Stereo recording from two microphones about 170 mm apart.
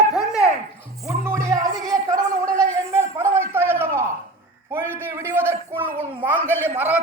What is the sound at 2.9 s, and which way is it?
A man's voice, 15° right (ahead or behind).